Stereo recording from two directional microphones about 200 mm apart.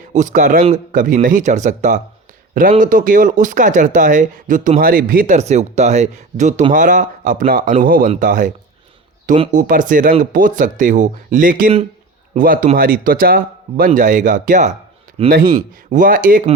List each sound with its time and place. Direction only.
0.1 s speech: 40° right (ahead or behind)
15.9 s speech: 45° right (ahead or behind)